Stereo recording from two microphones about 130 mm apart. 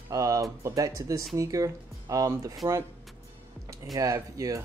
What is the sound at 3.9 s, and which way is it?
Speech, 25° right (ahead or behind).